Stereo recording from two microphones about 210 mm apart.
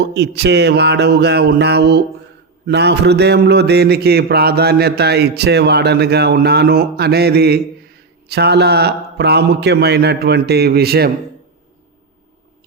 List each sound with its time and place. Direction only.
0.0 s a man's voice: 50° right (ahead or behind)